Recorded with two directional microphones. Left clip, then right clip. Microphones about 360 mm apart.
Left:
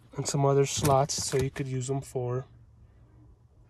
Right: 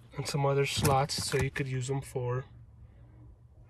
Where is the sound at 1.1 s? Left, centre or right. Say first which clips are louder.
Left 2 dB; centre.